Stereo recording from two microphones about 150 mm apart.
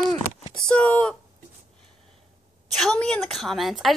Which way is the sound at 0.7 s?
5° left (ahead or behind).